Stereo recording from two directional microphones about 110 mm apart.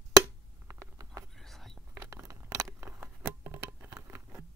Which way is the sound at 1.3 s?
Centre (ahead or behind).